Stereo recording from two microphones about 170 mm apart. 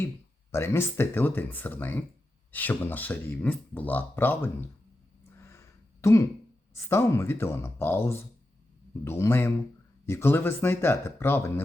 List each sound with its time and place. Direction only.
0.5 s speech: 15° left (ahead or behind)
5.4 s a sound: 15° left (ahead or behind)
6.7 s speech: 15° left (ahead or behind)